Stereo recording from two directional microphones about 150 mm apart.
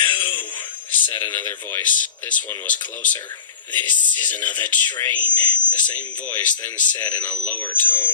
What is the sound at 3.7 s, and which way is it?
Speech, 10° left (ahead or behind).